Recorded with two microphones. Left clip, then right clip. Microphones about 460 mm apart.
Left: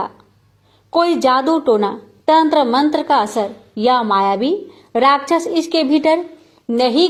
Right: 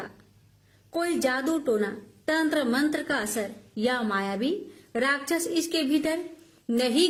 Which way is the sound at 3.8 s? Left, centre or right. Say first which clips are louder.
Left 13 dB; right.